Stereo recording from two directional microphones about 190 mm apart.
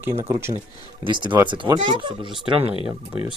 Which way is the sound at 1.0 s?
25° right (ahead or behind).